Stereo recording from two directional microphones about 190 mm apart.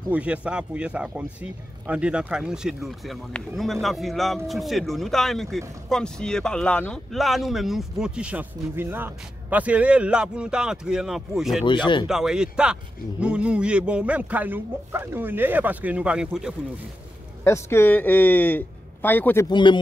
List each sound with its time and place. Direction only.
0.1 s speech: 5° right (ahead or behind)
11.6 s speech: 25° left (ahead or behind)
12.1 s speech: 5° right (ahead or behind)
17.4 s a man's voice: 15° left (ahead or behind)
19.5 s speech: 25° left (ahead or behind)